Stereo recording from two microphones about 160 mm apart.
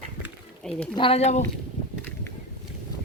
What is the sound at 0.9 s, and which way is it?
Speech, 35° left (ahead or behind).